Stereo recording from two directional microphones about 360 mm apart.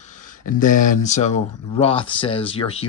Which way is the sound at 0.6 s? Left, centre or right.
Left.